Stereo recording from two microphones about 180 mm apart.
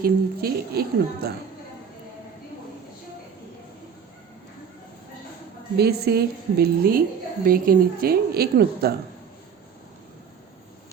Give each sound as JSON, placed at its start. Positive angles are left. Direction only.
{"t": 0.0, "sound": "a woman's voice", "side_deg": -60}
{"t": 5.7, "sound": "a woman's voice", "side_deg": -60}